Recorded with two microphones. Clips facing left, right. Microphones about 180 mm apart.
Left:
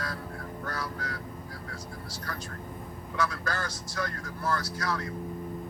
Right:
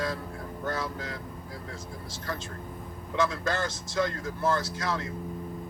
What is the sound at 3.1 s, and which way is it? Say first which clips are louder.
Speech: right 4 dB; 25° right (ahead or behind).